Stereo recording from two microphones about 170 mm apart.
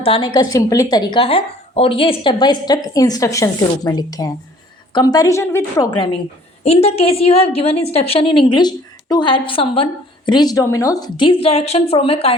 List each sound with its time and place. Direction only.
0.0 s speech: 30° left (ahead or behind); by 5.6 s 15° left (ahead or behind)
5.7 s speech: 25° left (ahead or behind)
6.7 s a woman's voice: 35° left (ahead or behind)